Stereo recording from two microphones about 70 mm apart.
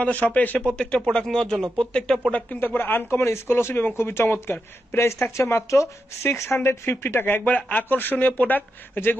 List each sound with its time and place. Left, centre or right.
0.0 s speech: left
0.6 s speech: centre; by 9.2 s left